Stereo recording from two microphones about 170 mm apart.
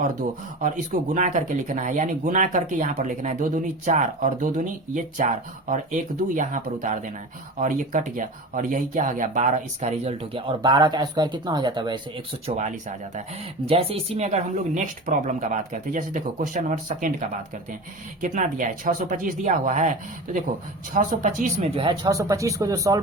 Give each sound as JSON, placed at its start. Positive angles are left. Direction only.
{"t": 0.0, "sound": "speech", "side_deg": -50}
{"t": 12.5, "sound": "speech", "side_deg": -45}